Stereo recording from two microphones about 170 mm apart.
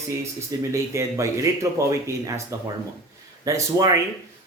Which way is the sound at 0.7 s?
15° right (ahead or behind).